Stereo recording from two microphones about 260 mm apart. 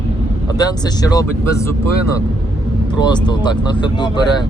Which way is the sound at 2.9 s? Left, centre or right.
Centre.